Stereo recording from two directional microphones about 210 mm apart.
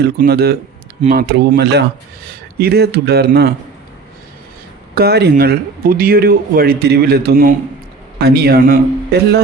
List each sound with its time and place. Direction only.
0.0 s speech: 50° right (ahead or behind)
4.9 s speech: 50° right (ahead or behind)